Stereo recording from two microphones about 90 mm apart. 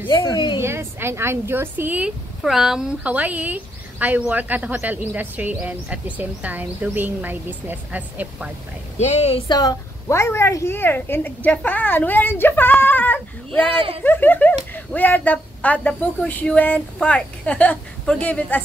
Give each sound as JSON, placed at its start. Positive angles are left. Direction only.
{"t": 0.1, "sound": "a woman's voice", "side_deg": 50}
{"t": 0.6, "sound": "speech", "side_deg": -30}
{"t": 9.5, "sound": "speech", "side_deg": 45}